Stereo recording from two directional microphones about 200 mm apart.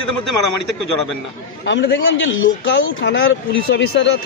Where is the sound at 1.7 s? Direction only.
65° left (ahead or behind).